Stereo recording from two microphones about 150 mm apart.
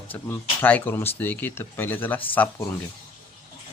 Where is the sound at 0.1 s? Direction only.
10° left (ahead or behind).